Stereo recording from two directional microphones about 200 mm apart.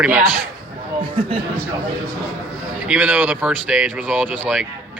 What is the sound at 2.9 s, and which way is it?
Speech, 5° right (ahead or behind).